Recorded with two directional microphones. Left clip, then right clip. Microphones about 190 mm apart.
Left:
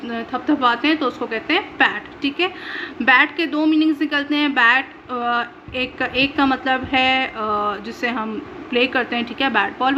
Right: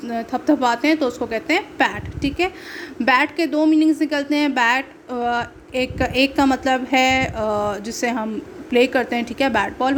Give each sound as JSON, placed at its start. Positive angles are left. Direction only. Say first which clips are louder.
{"t": 0.0, "sound": "a woman's voice", "louder": "right 2 dB", "side_deg": -40}